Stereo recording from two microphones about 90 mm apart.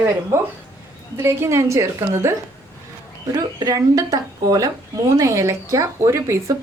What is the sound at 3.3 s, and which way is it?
Speech, 45° right (ahead or behind).